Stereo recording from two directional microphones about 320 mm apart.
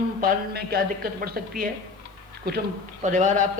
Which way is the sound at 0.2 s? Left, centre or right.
Right.